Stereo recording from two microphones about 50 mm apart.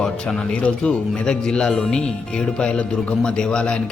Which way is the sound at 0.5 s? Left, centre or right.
Left.